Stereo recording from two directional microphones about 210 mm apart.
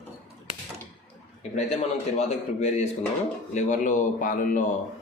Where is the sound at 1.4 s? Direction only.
30° left (ahead or behind).